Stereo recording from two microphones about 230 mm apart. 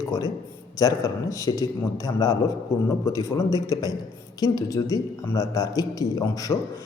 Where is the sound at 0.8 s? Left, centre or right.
Centre.